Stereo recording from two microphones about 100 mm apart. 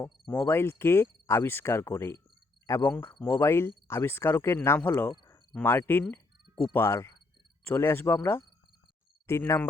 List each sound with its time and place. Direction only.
0.3 s speech: 20° left (ahead or behind)